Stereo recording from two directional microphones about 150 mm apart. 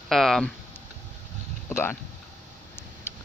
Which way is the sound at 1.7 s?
15° left (ahead or behind).